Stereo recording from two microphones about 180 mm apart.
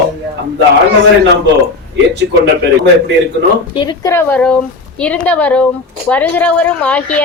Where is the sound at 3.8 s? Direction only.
25° left (ahead or behind).